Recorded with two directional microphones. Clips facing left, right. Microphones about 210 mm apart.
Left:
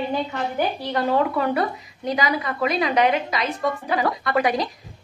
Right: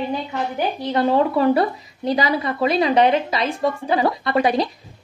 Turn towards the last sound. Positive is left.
turn(degrees=-25)  # may be behind; listen again after turning